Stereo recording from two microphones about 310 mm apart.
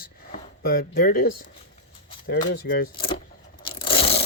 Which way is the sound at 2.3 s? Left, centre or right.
Left.